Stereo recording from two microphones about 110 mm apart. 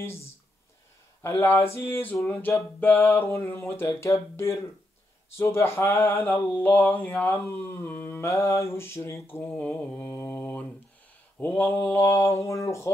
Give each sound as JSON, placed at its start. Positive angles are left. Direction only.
{"t": 1.2, "sound": "mantra", "side_deg": 20}